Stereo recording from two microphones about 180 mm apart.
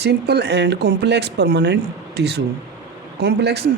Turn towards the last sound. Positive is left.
turn(degrees=-65)  # may be behind; listen again after turning